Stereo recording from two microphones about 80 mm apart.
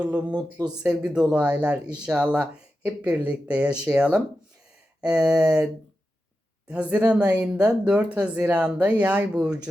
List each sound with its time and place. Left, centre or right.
0.0 s speech: centre
6.7 s speech: centre